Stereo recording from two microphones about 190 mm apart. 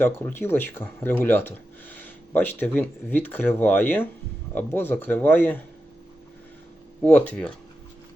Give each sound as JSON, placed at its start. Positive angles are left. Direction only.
{"t": 0.0, "sound": "speech", "side_deg": 10}
{"t": 7.0, "sound": "speech", "side_deg": 10}